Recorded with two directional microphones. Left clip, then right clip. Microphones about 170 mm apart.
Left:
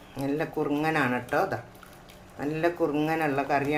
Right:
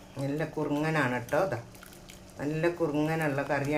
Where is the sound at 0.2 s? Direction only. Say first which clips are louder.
Left 4 dB; 30° left (ahead or behind).